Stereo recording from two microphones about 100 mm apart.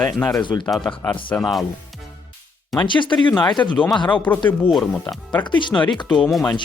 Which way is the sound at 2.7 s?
50° left (ahead or behind).